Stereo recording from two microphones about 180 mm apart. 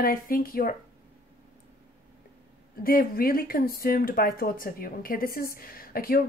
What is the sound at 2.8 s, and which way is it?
Speech, 55° left (ahead or behind).